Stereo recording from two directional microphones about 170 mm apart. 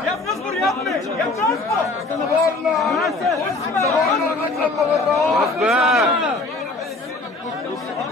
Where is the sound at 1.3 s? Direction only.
20° left (ahead or behind).